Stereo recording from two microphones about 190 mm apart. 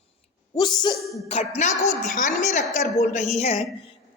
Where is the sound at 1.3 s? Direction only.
35° left (ahead or behind).